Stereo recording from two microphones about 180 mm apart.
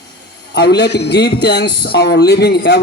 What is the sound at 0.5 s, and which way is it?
A man's voice, 70° left (ahead or behind).